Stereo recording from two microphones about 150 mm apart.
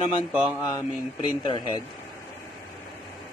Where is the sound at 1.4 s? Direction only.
30° left (ahead or behind).